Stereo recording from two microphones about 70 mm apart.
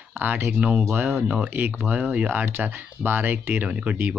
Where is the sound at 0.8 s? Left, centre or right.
Right.